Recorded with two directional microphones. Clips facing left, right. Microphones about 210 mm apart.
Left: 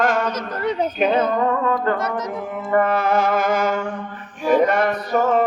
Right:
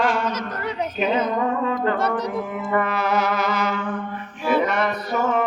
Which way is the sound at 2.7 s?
50° left (ahead or behind).